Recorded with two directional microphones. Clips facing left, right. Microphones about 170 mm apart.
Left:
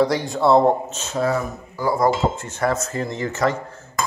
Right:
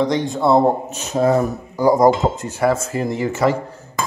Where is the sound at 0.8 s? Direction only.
10° right (ahead or behind).